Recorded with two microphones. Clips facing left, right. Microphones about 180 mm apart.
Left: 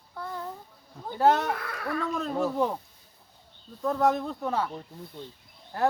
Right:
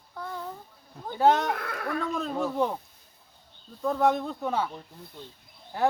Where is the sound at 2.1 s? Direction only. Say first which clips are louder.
Left 1 dB; centre (ahead or behind).